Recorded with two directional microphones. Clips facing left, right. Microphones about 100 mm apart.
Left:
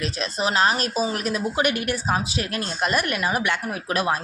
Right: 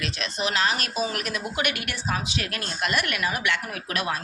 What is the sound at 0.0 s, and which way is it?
Speech, 35° left (ahead or behind).